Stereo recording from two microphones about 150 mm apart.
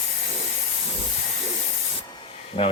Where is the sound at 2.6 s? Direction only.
40° left (ahead or behind).